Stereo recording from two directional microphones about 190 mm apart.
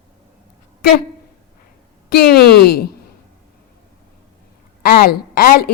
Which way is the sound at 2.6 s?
55° left (ahead or behind).